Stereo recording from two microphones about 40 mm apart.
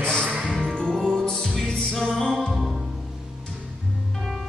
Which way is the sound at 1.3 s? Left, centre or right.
Centre.